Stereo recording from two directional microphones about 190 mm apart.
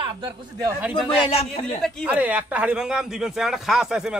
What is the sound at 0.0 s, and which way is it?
Speech, 25° right (ahead or behind).